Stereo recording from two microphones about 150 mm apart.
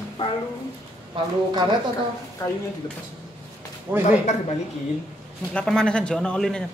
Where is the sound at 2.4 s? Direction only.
25° left (ahead or behind).